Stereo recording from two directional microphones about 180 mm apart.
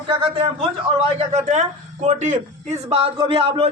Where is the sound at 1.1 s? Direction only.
40° right (ahead or behind).